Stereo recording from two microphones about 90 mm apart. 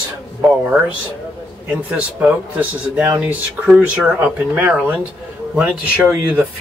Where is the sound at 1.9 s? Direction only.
20° right (ahead or behind).